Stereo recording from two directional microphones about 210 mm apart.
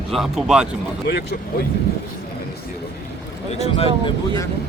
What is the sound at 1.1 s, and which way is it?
Speech, 50° left (ahead or behind).